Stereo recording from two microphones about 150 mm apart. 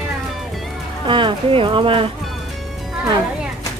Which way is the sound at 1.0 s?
35° right (ahead or behind).